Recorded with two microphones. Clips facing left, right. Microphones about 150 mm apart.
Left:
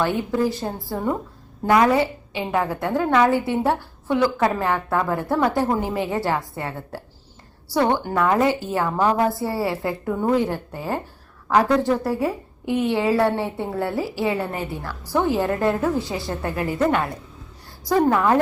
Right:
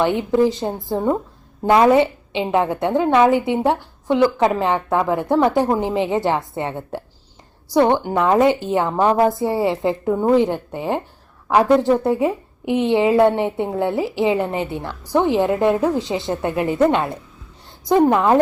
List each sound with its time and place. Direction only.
0.0 s a woman's voice: 20° right (ahead or behind)